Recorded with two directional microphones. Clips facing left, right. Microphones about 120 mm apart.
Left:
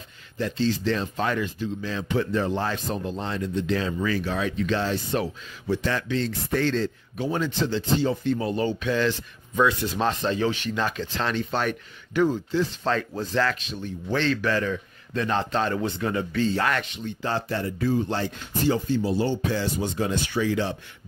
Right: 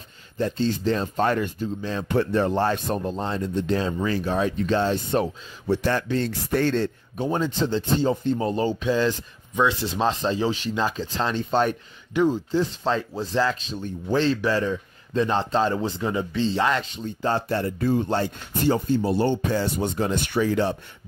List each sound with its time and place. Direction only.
0.4 s speech: 40° right (ahead or behind)
2.5 s speech: 35° right (ahead or behind)
5.9 s speech: 40° right (ahead or behind)
7.6 s a man's voice: 35° right (ahead or behind)
10.7 s speech: 15° right (ahead or behind)
11.2 s a man's voice: 30° right (ahead or behind)
12.1 s a man's voice: 15° right (ahead or behind)
13.1 s speech: 10° right (ahead or behind)
13.7 s a man's voice: 35° right (ahead or behind)
16.9 s speech: 40° right (ahead or behind)
19.0 s speech: 55° right (ahead or behind)